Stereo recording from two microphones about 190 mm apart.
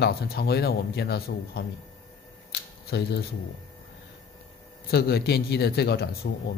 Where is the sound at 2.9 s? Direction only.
65° left (ahead or behind).